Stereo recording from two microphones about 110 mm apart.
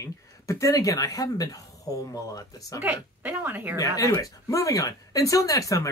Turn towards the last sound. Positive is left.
turn(degrees=30)  # may be behind; listen again after turning